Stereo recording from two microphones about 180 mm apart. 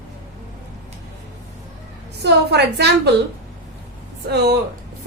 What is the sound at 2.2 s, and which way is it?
Speech, 65° right (ahead or behind).